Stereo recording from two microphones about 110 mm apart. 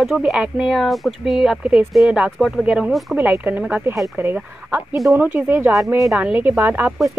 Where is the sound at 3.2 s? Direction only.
15° right (ahead or behind).